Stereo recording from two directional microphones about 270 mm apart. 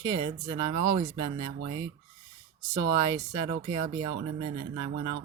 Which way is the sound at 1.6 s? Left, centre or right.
Centre.